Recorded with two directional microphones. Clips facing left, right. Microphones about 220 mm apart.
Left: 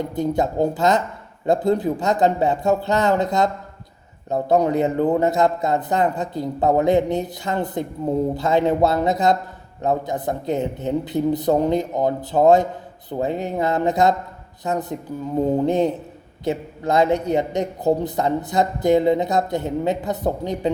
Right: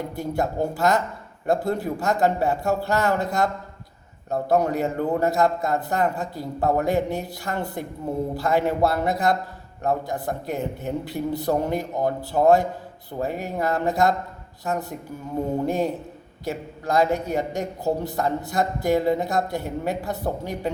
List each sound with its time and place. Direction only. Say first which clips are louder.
0.2 s a man's voice: left 5 dB; 20° left (ahead or behind)